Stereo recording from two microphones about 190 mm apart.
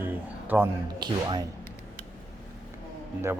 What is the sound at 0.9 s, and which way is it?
Speech, 25° right (ahead or behind).